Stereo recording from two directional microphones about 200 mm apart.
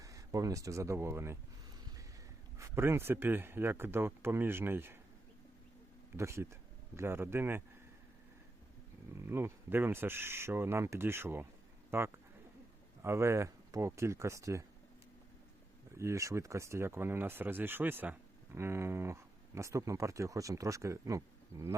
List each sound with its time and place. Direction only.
0.0 s speech: 15° right (ahead or behind)
2.6 s speech: 10° right (ahead or behind)
6.1 s speech: 15° right (ahead or behind)
9.1 s speech: 10° right (ahead or behind)
16.0 s speech: 15° right (ahead or behind)